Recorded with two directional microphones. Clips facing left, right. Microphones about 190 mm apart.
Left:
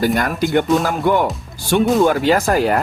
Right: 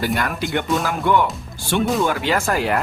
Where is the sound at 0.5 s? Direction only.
45° left (ahead or behind).